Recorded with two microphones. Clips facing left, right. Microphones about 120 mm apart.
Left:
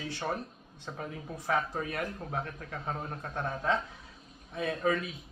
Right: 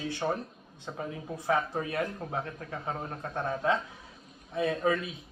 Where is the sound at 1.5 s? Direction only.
25° right (ahead or behind).